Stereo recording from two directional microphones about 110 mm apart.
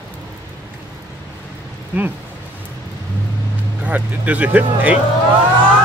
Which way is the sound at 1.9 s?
15° right (ahead or behind).